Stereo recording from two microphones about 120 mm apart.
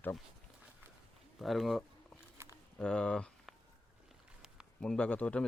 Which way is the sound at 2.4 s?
20° right (ahead or behind).